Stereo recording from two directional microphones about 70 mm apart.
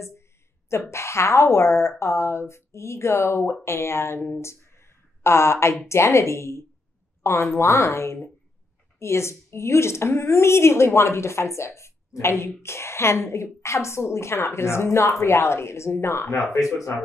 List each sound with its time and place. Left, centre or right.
0.7 s a woman's voice: left